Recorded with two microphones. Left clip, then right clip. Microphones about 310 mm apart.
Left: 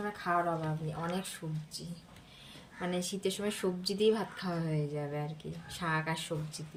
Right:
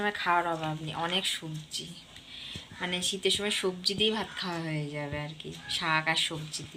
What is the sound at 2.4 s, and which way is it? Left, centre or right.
Speech, centre.